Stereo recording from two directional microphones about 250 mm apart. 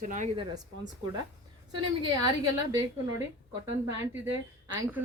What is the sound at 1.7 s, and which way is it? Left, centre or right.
Speech, centre.